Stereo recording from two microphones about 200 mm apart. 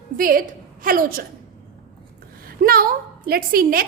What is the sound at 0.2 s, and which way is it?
A woman's voice, 45° right (ahead or behind).